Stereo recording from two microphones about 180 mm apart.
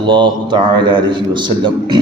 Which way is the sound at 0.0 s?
25° right (ahead or behind).